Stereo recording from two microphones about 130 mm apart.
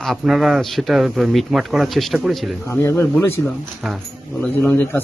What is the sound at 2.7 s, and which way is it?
Speech, 20° left (ahead or behind).